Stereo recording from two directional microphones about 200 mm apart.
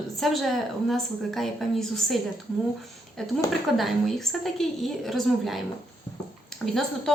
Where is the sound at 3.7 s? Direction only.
Centre (ahead or behind).